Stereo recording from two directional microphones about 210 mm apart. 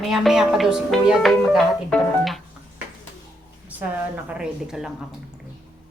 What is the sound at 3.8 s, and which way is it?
A woman's voice, 5° right (ahead or behind).